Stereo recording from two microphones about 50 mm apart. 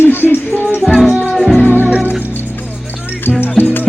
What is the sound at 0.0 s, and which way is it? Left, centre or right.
Music, left.